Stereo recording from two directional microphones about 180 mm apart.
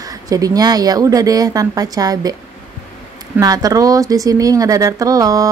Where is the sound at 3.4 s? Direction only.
20° right (ahead or behind).